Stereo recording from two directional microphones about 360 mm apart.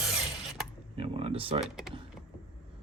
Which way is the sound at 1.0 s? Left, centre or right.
Centre.